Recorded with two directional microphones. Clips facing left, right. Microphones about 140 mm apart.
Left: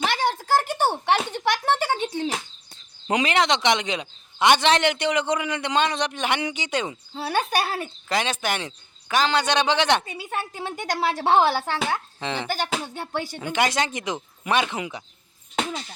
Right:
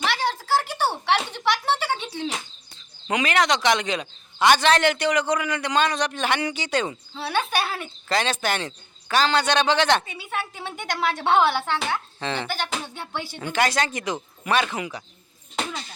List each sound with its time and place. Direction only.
0.0 s a sound: 50° left (ahead or behind)
3.1 s a man's voice: 30° left (ahead or behind)
7.2 s speech: 40° left (ahead or behind)
8.1 s a man's voice: 15° left (ahead or behind)
10.1 s speech: 40° left (ahead or behind)
12.2 s a man's voice: 15° left (ahead or behind)
12.5 s speech: 40° left (ahead or behind)
13.4 s a man's voice: 15° left (ahead or behind)